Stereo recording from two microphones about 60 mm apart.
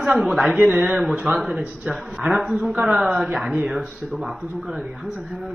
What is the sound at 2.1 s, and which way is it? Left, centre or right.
A woman's voice, centre.